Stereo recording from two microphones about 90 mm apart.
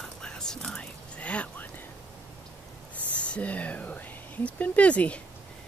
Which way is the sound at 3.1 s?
15° left (ahead or behind).